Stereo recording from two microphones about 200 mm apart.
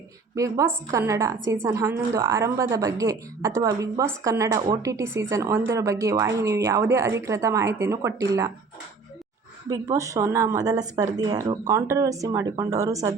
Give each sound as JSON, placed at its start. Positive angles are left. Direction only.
{"t": 0.3, "sound": "speech", "side_deg": -15}
{"t": 9.6, "sound": "speech", "side_deg": -20}